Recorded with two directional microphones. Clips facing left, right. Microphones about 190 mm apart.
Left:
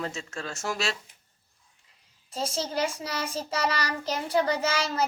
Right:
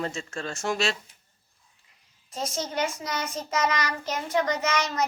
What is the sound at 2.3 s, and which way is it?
Child singing, 30° left (ahead or behind).